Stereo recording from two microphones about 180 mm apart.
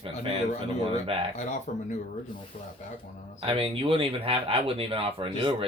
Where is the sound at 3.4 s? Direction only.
30° right (ahead or behind).